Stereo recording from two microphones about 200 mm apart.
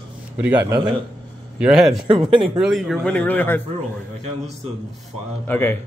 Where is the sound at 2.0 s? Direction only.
25° right (ahead or behind).